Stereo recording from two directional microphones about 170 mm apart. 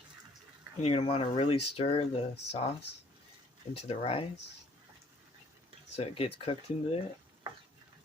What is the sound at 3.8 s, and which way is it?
Speech, 35° left (ahead or behind).